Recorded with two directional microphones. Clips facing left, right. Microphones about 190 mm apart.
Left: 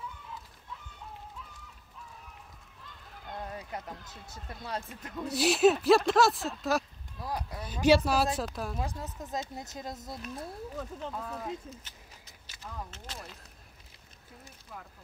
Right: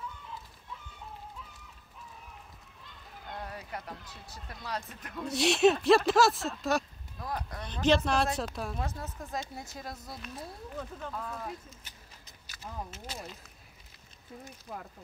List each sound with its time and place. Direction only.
3.4 s speech: 20° left (ahead or behind)
5.2 s speech: 5° left (ahead or behind)
8.8 s speech: 20° left (ahead or behind)
10.4 s speech: centre (ahead or behind)
11.0 s speech: 20° left (ahead or behind)
12.9 s speech: 5° right (ahead or behind)